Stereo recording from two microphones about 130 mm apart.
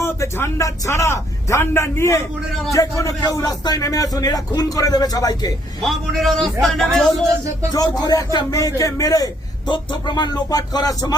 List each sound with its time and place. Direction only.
0.0 s speech: 20° left (ahead or behind)
5.8 s a man's voice: centre (ahead or behind)
7.7 s a man's voice: 30° left (ahead or behind)